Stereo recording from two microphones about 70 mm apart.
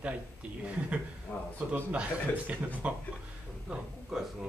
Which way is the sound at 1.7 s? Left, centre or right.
Right.